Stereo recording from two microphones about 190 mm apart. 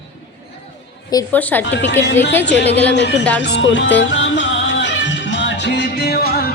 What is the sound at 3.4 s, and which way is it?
Music, 65° left (ahead or behind).